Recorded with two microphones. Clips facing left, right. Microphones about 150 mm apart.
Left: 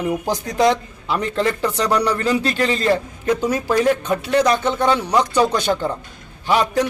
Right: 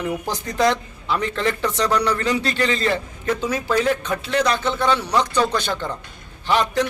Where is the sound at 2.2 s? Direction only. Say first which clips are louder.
Left 2 dB; 40° left (ahead or behind).